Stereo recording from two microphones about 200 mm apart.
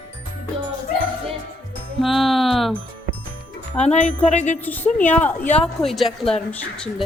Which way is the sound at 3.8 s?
35° left (ahead or behind).